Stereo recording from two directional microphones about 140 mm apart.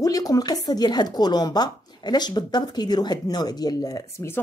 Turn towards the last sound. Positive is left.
turn(degrees=20)  # may be behind; listen again after turning